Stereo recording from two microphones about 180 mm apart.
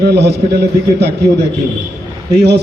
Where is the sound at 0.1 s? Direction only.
70° right (ahead or behind).